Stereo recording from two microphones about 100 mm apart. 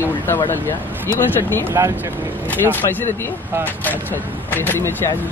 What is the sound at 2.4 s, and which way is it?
Speech, 15° left (ahead or behind).